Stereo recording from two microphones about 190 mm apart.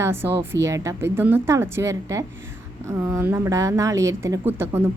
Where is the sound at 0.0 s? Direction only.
10° right (ahead or behind).